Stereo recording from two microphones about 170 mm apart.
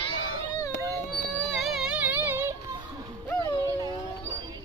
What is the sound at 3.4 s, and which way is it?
Music, 25° right (ahead or behind).